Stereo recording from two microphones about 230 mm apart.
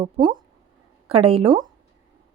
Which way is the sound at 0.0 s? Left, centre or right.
Centre.